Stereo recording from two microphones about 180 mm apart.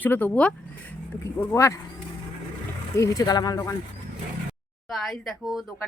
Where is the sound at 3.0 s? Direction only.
20° left (ahead or behind).